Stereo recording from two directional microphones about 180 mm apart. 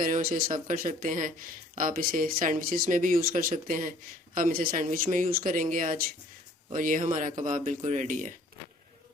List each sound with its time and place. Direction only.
0.0 s speech: 50° right (ahead or behind)